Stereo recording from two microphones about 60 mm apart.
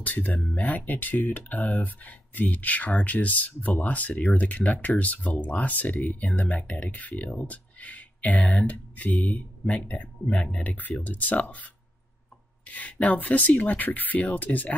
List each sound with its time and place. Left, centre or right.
0.0 s speech: left
12.6 s speech: left